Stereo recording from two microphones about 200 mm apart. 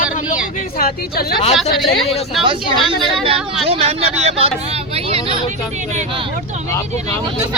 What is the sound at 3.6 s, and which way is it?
Speech, 30° right (ahead or behind).